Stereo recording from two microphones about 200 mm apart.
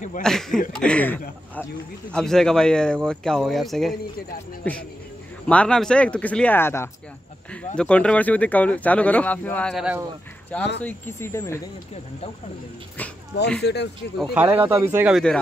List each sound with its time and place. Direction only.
0.2 s speech: centre (ahead or behind)
5.5 s speech: 5° left (ahead or behind)
13.6 s speech: 55° left (ahead or behind)
14.1 s speech: 5° right (ahead or behind)